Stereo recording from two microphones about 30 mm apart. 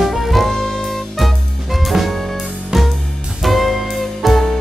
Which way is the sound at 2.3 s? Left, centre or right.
Centre.